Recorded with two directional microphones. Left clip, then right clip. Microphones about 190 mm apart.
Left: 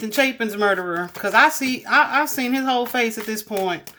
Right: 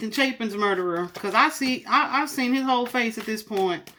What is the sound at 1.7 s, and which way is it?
A woman's voice, 50° left (ahead or behind).